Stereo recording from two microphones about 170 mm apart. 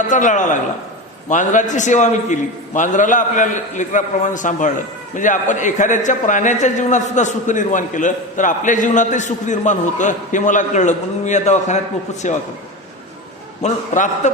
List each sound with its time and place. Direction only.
0.1 s a man's voice: 45° left (ahead or behind)
13.6 s a man's voice: 45° left (ahead or behind)